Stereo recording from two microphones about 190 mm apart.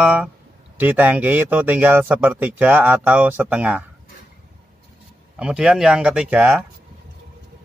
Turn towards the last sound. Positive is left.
turn(degrees=-10)  # may be behind; listen again after turning